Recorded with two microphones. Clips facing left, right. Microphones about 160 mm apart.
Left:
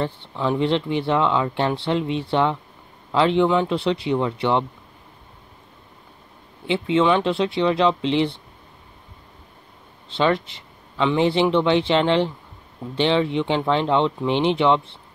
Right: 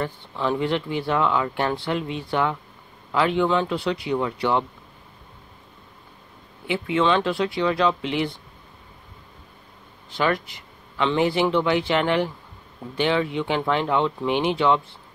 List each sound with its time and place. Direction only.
0.0 s speech: 20° left (ahead or behind)
6.7 s speech: 20° left (ahead or behind)
10.1 s speech: 25° left (ahead or behind)